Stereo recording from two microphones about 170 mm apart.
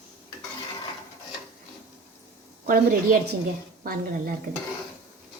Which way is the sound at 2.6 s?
55° right (ahead or behind).